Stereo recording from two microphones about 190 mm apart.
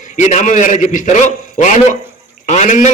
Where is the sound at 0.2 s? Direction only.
40° left (ahead or behind).